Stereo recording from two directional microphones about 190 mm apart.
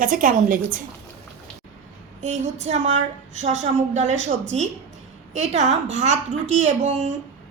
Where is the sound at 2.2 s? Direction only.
40° right (ahead or behind).